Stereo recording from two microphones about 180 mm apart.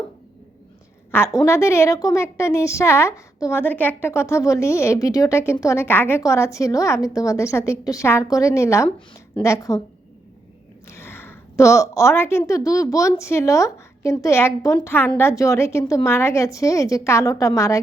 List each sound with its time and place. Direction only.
1.1 s a woman's voice: 15° left (ahead or behind)
10.8 s a woman's voice: 15° left (ahead or behind)